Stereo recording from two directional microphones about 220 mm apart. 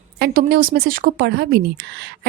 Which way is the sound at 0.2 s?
45° right (ahead or behind).